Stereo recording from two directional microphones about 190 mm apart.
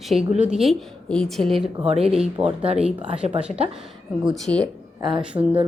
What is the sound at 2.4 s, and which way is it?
Speech, 30° right (ahead or behind).